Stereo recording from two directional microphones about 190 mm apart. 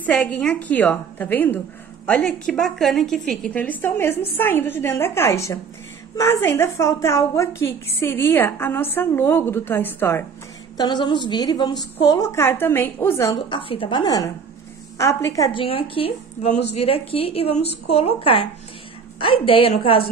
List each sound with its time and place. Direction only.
0.0 s a woman's voice: 10° left (ahead or behind)
10.8 s a woman's voice: 25° left (ahead or behind)
15.6 s a woman's voice: 30° left (ahead or behind)